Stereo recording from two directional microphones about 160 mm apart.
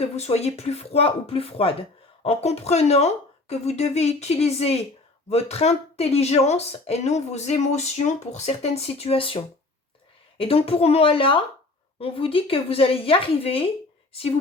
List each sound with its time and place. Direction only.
0.0 s speech: 40° left (ahead or behind)